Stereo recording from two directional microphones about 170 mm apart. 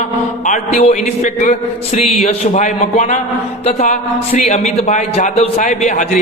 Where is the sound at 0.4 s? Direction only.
40° left (ahead or behind).